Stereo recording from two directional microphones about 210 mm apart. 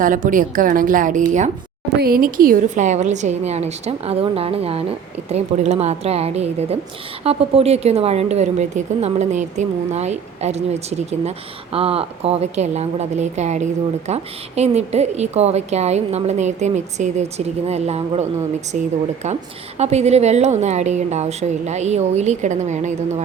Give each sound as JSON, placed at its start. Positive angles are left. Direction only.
{"t": 0.0, "sound": "speech", "side_deg": -40}